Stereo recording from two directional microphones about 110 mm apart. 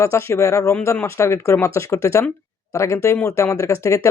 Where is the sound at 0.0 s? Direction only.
25° left (ahead or behind).